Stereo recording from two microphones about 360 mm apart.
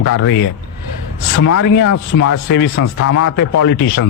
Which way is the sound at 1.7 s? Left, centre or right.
Left.